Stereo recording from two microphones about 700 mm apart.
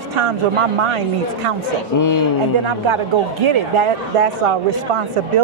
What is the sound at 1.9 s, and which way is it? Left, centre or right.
Speech, left.